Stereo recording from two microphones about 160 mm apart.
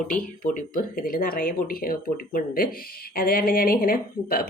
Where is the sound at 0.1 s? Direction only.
55° left (ahead or behind).